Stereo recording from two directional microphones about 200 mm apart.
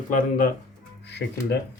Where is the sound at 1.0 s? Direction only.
55° left (ahead or behind).